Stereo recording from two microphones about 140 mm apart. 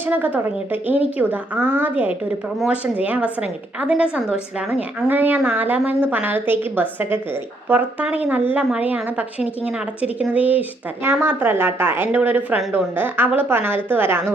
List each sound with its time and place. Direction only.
0.0 s a woman's voice: 10° right (ahead or behind)